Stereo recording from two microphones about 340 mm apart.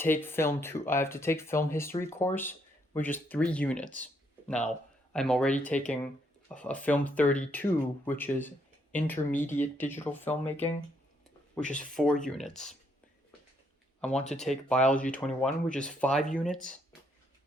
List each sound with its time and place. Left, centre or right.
0.0 s speech: centre
11.6 s speech: left
11.9 s speech: centre
14.0 s speech: centre